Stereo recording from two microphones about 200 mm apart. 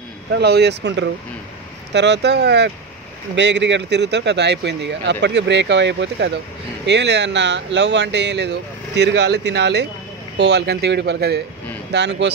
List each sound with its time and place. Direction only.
0.3 s speech: 55° right (ahead or behind)